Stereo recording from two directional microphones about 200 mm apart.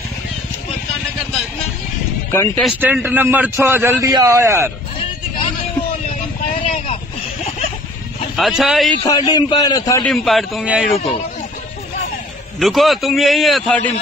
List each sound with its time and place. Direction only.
2.3 s speech: 10° left (ahead or behind)
2.8 s a man's voice: 10° right (ahead or behind)
8.4 s a man's voice: centre (ahead or behind)
9.0 s a man's voice: 20° left (ahead or behind)
10.0 s a man's voice: centre (ahead or behind)
12.5 s a man's voice: centre (ahead or behind)